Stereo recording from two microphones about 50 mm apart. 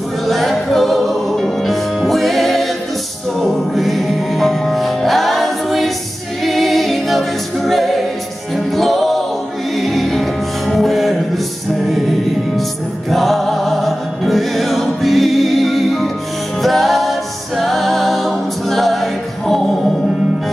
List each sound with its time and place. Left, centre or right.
0.3 s music: centre
6.4 s a capella: centre
8.5 s music: centre
13.1 s music: centre